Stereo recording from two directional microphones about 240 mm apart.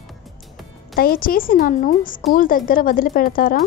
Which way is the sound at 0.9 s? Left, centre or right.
Left.